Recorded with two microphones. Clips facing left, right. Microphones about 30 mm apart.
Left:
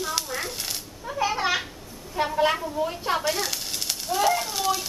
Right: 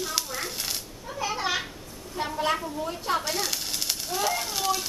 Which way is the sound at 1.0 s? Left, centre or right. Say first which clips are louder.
Left 4 dB; centre.